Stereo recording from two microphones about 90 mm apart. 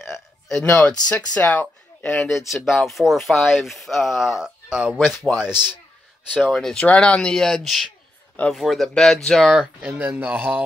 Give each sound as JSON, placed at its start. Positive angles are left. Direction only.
{"t": 0.0, "sound": "a sound", "side_deg": 5}
{"t": 1.0, "sound": "speech", "side_deg": 15}
{"t": 2.1, "sound": "speech", "side_deg": 0}
{"t": 6.6, "sound": "speech", "side_deg": 10}